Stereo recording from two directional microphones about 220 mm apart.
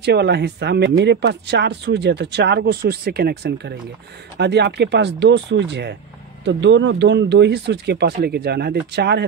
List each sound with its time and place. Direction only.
0.0 s speech: 50° right (ahead or behind)